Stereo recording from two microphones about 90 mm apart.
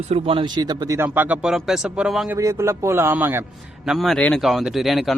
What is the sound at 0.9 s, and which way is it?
Speech, 20° right (ahead or behind).